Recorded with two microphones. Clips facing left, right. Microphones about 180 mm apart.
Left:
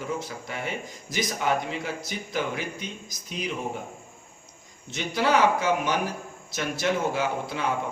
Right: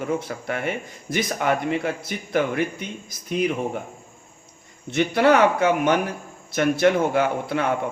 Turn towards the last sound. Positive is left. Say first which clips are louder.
# right 5 dB
turn(degrees=-60)  # may be behind; listen again after turning